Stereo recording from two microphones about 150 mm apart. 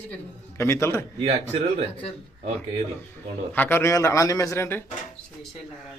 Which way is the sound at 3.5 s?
10° left (ahead or behind).